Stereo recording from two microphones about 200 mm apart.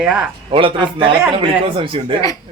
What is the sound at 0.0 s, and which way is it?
Speech, 5° right (ahead or behind).